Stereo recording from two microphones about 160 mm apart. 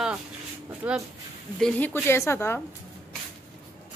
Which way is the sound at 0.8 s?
10° right (ahead or behind).